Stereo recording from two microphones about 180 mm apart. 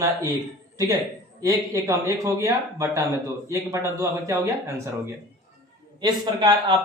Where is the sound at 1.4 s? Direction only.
15° right (ahead or behind).